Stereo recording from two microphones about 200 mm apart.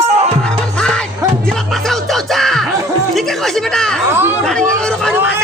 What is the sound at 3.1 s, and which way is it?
Speech, centre (ahead or behind).